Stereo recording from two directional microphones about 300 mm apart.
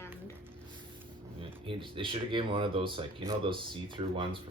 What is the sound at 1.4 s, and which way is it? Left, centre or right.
Speech, centre.